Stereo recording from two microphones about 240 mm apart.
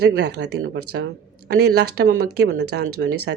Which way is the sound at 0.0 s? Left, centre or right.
Right.